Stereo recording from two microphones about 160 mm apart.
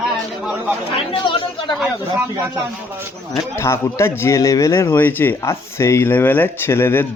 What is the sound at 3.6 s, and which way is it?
Speech, 15° left (ahead or behind).